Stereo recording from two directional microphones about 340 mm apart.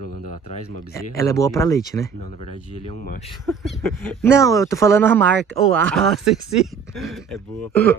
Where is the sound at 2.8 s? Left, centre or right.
Left.